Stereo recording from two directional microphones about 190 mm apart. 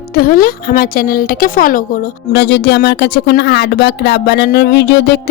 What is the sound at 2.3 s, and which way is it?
Speech, 65° left (ahead or behind).